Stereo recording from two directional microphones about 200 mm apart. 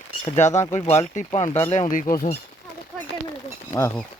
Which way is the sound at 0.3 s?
35° left (ahead or behind).